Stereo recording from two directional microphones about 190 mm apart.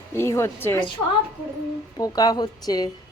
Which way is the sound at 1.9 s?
20° left (ahead or behind).